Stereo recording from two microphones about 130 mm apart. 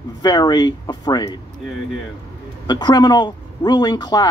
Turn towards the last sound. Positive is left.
turn(degrees=35)  # may be behind; listen again after turning